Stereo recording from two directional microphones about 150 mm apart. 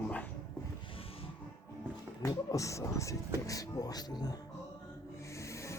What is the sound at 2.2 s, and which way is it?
Music, 20° left (ahead or behind).